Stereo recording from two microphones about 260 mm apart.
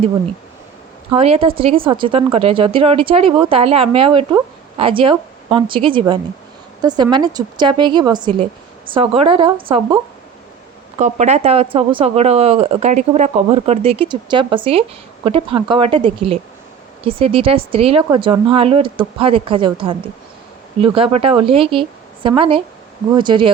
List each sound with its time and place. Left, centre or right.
1.1 s speech: right